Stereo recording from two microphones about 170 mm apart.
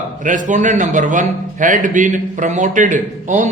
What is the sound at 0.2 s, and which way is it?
A man's voice, 50° right (ahead or behind).